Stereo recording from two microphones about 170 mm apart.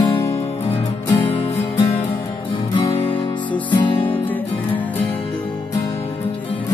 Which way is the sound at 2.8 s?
30° left (ahead or behind).